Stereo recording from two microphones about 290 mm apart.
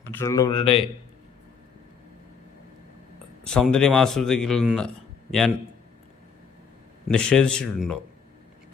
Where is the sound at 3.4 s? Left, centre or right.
Centre.